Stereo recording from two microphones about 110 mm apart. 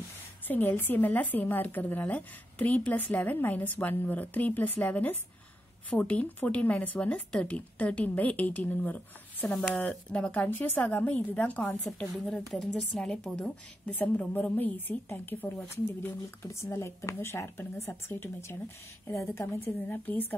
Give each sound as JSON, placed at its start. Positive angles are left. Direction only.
{"t": 0.5, "sound": "speech", "side_deg": 20}
{"t": 11.8, "sound": "a woman's voice", "side_deg": 0}
{"t": 16.5, "sound": "a woman's voice", "side_deg": 25}